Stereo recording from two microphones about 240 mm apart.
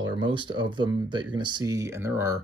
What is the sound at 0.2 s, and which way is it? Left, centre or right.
Speech, centre.